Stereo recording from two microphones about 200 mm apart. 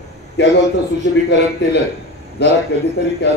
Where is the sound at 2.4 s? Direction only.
60° left (ahead or behind).